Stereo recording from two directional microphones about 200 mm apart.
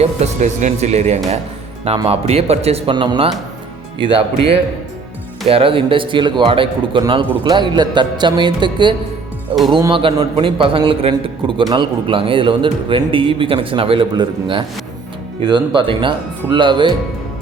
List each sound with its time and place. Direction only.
0.0 s a man's voice: 35° right (ahead or behind)